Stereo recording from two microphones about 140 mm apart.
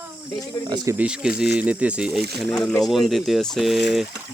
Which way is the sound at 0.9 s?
5° right (ahead or behind).